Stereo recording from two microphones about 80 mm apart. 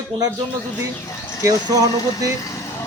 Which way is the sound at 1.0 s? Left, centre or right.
Left.